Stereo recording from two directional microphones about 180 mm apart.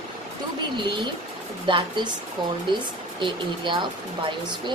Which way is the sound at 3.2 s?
25° right (ahead or behind).